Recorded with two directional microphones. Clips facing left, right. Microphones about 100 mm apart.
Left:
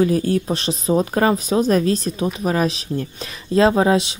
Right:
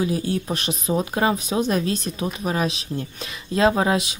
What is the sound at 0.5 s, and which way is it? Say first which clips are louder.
Speech: left 5 dB; 30° left (ahead or behind).